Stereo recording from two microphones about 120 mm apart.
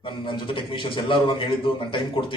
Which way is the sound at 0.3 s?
45° left (ahead or behind).